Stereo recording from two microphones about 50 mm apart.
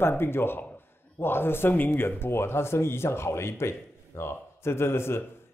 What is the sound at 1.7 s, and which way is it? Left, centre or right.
A man's voice, left.